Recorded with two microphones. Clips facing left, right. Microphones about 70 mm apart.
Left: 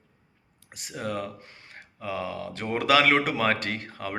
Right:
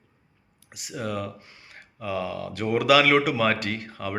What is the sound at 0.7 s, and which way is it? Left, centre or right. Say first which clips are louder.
A man's voice: right 1 dB; left.